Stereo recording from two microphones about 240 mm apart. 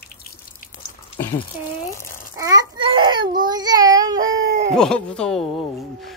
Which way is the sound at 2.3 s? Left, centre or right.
Centre.